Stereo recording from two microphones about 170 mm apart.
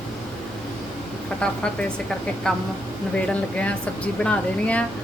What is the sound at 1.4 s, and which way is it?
Speech, 5° left (ahead or behind).